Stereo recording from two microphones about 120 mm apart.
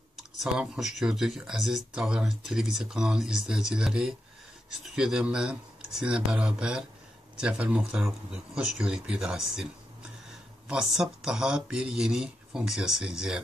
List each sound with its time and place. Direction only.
0.1 s speech: centre (ahead or behind)